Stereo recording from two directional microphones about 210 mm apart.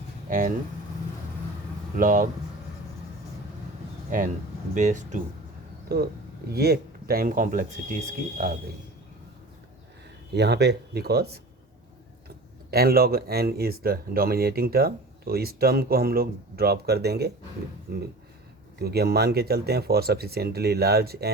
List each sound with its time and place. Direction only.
0.3 s speech: 40° right (ahead or behind)
2.0 s speech: 40° right (ahead or behind)
4.7 s speech: 35° right (ahead or behind)
5.9 s speech: 50° right (ahead or behind)
10.3 s speech: 55° right (ahead or behind)
12.7 s speech: 45° right (ahead or behind)